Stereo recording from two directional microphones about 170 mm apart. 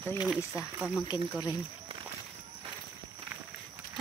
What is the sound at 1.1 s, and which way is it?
Speech, 5° right (ahead or behind).